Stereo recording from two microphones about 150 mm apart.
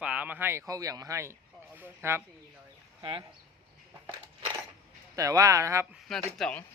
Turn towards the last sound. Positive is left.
turn(degrees=5)  # may be behind; listen again after turning